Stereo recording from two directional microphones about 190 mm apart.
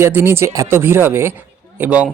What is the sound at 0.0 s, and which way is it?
Speech, 15° right (ahead or behind).